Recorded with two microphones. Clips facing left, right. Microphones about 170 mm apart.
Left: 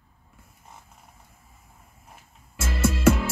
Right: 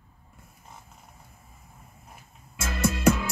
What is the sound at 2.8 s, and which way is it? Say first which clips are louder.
Music: left 2 dB; 15° right (ahead or behind).